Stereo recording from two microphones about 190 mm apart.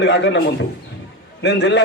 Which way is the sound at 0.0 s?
70° left (ahead or behind).